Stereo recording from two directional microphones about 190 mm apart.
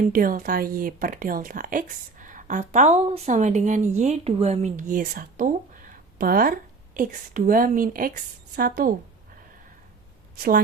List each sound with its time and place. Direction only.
0.0 s a woman's voice: 50° right (ahead or behind)
10.3 s speech: 50° right (ahead or behind)